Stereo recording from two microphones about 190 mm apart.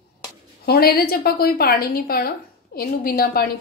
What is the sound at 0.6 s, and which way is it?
A woman's voice, 55° left (ahead or behind).